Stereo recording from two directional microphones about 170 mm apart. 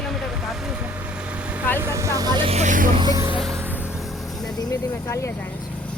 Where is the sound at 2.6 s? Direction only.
50° right (ahead or behind).